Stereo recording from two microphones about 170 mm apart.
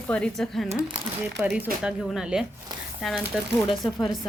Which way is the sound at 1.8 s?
Centre (ahead or behind).